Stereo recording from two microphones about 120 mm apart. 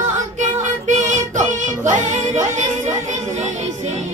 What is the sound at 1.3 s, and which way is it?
Music, 90° right.